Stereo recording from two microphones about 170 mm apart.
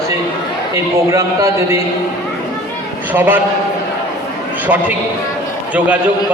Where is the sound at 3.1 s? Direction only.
10° right (ahead or behind).